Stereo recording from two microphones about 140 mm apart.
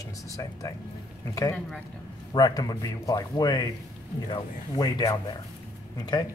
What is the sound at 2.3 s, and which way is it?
Speech, 30° left (ahead or behind).